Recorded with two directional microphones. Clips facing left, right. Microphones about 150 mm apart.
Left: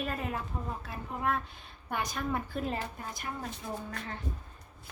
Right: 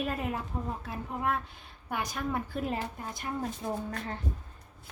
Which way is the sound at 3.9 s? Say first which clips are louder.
Right 3 dB; 40° right (ahead or behind).